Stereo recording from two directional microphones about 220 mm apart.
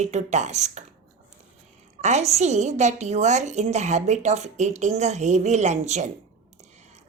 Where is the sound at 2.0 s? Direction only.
30° right (ahead or behind).